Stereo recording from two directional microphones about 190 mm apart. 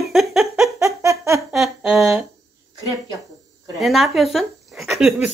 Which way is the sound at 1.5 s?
Centre (ahead or behind).